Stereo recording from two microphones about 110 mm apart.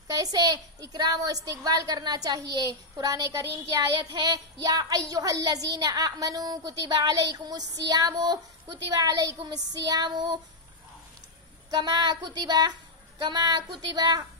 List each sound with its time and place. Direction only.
0.1 s a child's voice: 35° right (ahead or behind)
11.7 s a child's voice: 40° right (ahead or behind)